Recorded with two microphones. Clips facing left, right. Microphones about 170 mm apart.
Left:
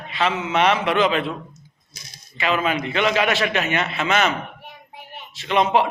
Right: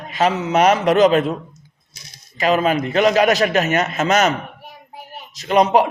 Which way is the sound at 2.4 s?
40° right (ahead or behind).